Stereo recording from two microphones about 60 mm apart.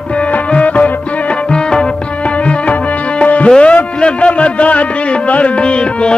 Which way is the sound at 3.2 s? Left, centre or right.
Left.